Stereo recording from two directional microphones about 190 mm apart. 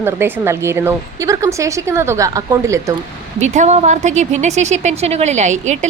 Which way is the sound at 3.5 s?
35° right (ahead or behind).